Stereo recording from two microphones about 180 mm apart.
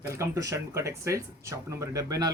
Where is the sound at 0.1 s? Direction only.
15° right (ahead or behind).